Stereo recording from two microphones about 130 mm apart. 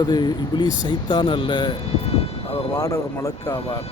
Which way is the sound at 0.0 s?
30° left (ahead or behind).